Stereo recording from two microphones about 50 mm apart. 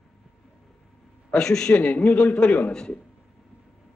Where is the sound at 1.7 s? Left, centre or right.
Left.